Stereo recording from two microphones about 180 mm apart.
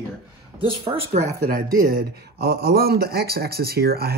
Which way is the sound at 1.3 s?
60° right (ahead or behind).